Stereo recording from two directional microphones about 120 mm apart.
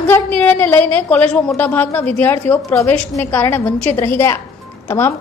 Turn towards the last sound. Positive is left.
turn(degrees=20)  # may be behind; listen again after turning